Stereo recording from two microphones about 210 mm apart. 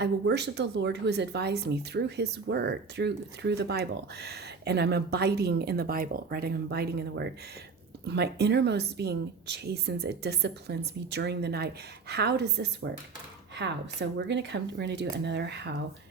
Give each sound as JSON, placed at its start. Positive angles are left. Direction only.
{"t": 0.0, "sound": "a woman's voice", "side_deg": -55}